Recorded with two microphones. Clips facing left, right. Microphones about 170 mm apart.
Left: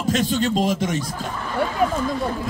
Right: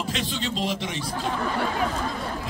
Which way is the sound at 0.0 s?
45° left (ahead or behind).